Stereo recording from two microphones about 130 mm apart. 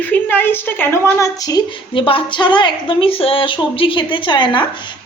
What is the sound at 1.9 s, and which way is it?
A woman's voice, 40° left (ahead or behind).